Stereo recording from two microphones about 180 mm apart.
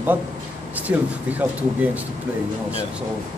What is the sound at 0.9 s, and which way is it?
Speech, 10° right (ahead or behind).